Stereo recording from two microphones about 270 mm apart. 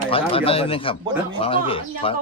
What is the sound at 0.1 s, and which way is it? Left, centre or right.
A man's voice, centre.